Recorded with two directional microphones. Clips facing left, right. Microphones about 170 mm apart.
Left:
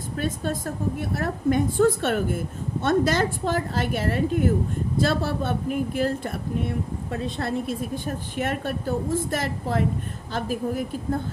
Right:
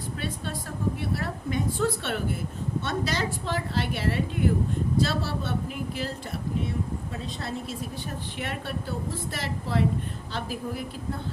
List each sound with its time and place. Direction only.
0.2 s speech: 45° left (ahead or behind)